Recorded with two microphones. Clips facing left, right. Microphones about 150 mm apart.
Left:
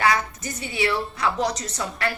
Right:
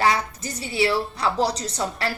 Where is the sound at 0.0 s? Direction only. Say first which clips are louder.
Right 1 dB; 35° right (ahead or behind).